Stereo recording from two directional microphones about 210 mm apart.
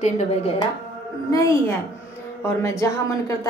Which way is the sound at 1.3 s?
15° left (ahead or behind).